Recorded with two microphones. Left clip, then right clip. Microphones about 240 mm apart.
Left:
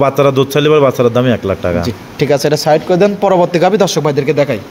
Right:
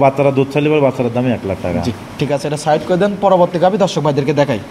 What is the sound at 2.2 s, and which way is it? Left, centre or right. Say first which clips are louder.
Speech: left 5 dB; left.